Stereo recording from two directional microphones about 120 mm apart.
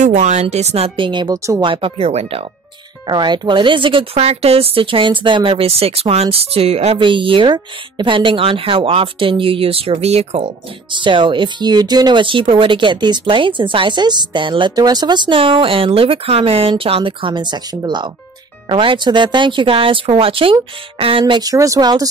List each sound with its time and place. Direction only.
0.0 s speech: 85° right; by 1.6 s 30° right (ahead or behind)
1.6 s speech: 45° right (ahead or behind)
3.1 s speech: 40° right (ahead or behind); by 7.0 s 60° right (ahead or behind)
7.0 s speech: 45° right (ahead or behind)